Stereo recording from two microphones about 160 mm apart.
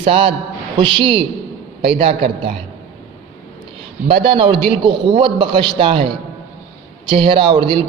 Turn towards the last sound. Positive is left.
turn(degrees=-30)  # may be behind; listen again after turning